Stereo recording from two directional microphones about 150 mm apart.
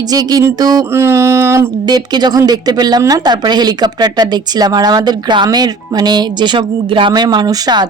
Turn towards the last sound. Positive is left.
turn(degrees=-25)  # may be behind; listen again after turning